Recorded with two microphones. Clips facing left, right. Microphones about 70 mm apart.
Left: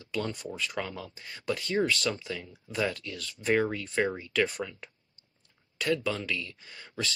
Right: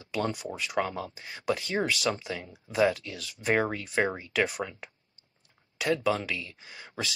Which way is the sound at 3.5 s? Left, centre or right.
Right.